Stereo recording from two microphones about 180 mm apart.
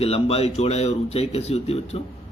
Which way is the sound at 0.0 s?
35° left (ahead or behind).